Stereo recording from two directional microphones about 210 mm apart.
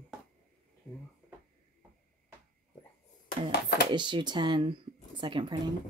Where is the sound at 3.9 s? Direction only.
20° right (ahead or behind).